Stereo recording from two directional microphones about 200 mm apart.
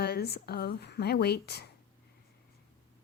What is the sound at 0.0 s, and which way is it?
Speech, 55° left (ahead or behind).